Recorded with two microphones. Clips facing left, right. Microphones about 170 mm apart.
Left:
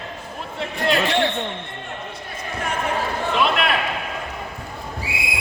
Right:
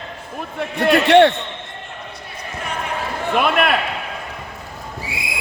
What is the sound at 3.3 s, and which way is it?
Speech, 55° right (ahead or behind).